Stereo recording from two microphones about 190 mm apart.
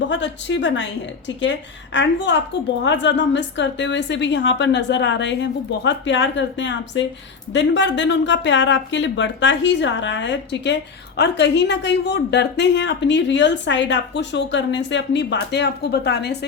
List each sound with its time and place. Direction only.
0.1 s a woman's voice: 75° left (ahead or behind)